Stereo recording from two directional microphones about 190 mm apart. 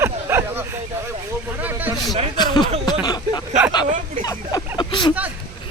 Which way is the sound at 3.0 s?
20° left (ahead or behind).